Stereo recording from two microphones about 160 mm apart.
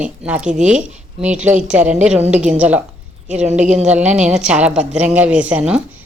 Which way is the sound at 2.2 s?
45° right (ahead or behind).